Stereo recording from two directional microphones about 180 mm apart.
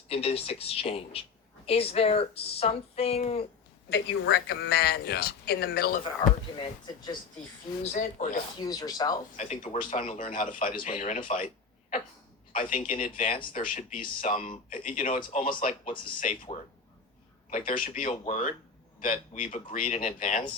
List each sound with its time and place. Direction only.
0.1 s speech: 35° left (ahead or behind)
3.8 s speech: 70° left (ahead or behind)
6.2 s speech: 25° left (ahead or behind)
7.8 s speech: 45° left (ahead or behind)
8.6 s speech: 20° left (ahead or behind)
9.3 s speech: 40° left (ahead or behind)
12.5 s speech: 45° left (ahead or behind)
17.7 s speech: 45° left (ahead or behind)